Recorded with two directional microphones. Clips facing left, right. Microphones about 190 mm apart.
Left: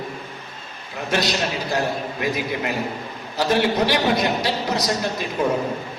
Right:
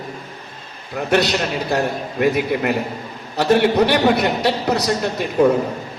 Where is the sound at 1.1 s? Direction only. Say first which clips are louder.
Right 5 dB; 65° right (ahead or behind).